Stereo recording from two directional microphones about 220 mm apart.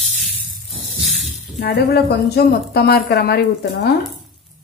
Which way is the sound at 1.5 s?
45° left (ahead or behind).